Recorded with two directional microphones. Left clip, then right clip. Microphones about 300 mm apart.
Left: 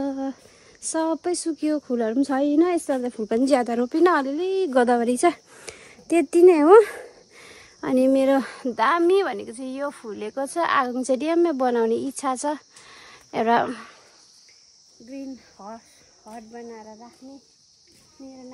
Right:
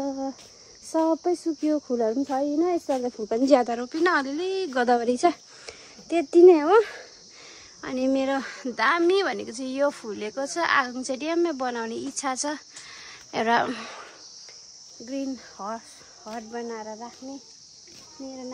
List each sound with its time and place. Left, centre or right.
0.0 s a sound: left
0.8 s speech: left; by 4.8 s centre
4.8 s speech: left
7.8 s speech: left
15.0 s speech: centre
18.2 s speech: centre